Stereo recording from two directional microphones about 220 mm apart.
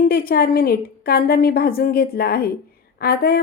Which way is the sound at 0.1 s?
45° left (ahead or behind).